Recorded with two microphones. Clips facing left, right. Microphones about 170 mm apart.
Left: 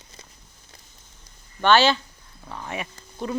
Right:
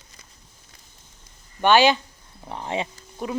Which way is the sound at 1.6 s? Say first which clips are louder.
Right 1 dB; 15° right (ahead or behind).